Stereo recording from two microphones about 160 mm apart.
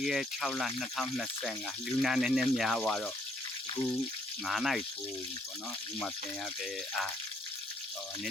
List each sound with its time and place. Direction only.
0.0 s speech: centre (ahead or behind)
4.4 s speech: centre (ahead or behind)